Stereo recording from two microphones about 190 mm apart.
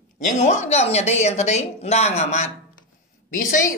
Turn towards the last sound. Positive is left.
turn(degrees=45)  # may be behind; listen again after turning